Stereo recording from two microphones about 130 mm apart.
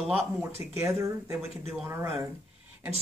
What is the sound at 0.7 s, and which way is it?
Speech, 20° right (ahead or behind).